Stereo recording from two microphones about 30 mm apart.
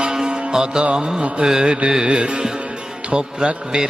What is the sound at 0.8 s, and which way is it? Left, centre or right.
Music, right.